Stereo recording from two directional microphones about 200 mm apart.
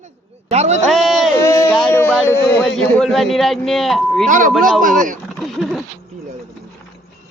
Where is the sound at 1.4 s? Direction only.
15° left (ahead or behind).